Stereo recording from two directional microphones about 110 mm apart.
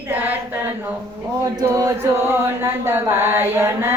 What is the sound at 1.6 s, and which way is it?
Chant, 30° right (ahead or behind).